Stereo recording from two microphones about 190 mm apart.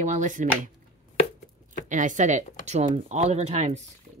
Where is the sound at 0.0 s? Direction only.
40° right (ahead or behind).